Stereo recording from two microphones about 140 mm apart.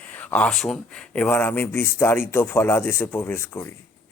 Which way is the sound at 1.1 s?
15° left (ahead or behind).